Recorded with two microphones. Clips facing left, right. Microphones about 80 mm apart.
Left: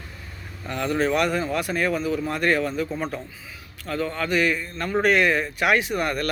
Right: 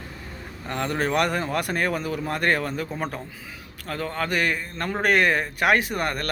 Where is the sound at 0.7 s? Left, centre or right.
Right.